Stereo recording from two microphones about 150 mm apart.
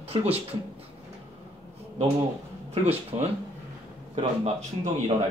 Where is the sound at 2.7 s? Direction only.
45° right (ahead or behind).